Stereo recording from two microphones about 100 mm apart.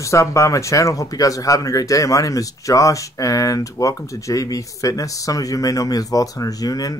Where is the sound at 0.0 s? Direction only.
30° left (ahead or behind).